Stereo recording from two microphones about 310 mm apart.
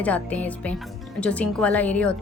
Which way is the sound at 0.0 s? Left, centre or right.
Centre.